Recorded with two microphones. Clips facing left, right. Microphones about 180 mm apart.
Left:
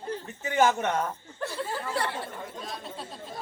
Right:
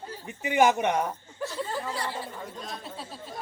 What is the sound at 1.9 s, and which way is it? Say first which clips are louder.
Speech: left 3 dB; 60° left (ahead or behind).